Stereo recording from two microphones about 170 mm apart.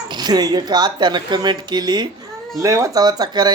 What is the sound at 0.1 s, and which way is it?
Speech, 25° right (ahead or behind).